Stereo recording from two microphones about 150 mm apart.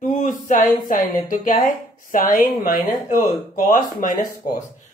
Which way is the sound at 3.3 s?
55° left (ahead or behind).